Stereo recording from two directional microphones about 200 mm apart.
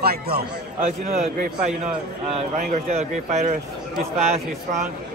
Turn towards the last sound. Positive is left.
turn(degrees=-35)  # may be behind; listen again after turning